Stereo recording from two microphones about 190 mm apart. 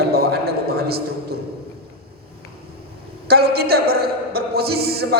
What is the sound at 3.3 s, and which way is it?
A man's voice, 55° right (ahead or behind).